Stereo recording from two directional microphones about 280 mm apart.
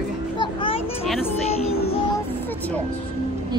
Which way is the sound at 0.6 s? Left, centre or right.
Centre.